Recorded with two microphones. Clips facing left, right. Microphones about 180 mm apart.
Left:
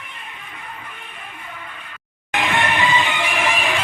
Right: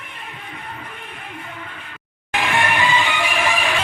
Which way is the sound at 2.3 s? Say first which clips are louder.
Even; 20° left (ahead or behind).